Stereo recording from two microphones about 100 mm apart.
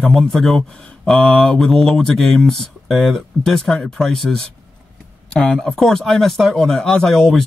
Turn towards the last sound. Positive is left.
turn(degrees=0)  # may be behind; listen again after turning